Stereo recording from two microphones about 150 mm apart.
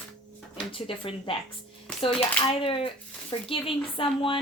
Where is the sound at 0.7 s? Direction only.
35° left (ahead or behind).